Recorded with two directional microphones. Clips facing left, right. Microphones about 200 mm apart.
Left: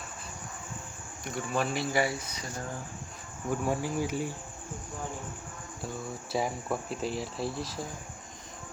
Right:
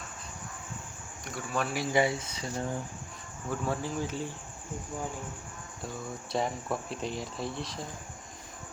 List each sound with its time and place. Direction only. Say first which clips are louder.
1.2 s speech: left 2 dB; centre (ahead or behind)
1.8 s speech: right 2 dB; 20° right (ahead or behind)
3.5 s cricket: left 2 dB; 10° left (ahead or behind)
6.3 s speech: even; 5° left (ahead or behind)